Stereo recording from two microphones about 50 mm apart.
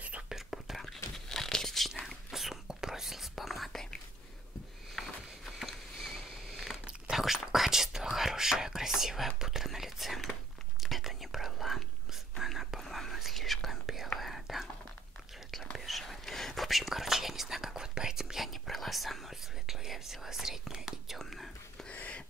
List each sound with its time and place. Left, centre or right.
0.3 s whispering: centre
0.8 s whispering: centre
4.9 s a sound: centre
7.1 s whispering: centre
15.7 s whispering: centre
21.2 s whispering: centre
21.8 s a sound: left